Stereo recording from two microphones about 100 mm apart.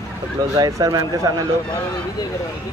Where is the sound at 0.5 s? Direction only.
35° right (ahead or behind).